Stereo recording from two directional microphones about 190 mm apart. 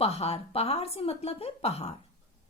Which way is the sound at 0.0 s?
35° left (ahead or behind).